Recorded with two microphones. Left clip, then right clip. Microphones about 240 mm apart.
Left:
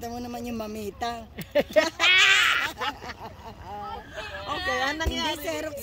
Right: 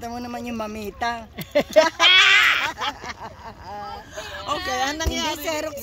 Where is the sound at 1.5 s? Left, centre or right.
Right.